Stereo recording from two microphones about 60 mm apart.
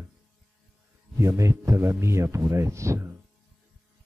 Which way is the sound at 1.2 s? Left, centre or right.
Right.